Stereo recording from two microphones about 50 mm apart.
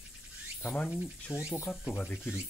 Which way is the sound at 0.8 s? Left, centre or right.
Centre.